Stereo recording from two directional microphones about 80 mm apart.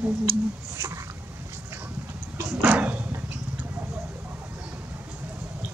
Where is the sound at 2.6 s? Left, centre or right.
Centre.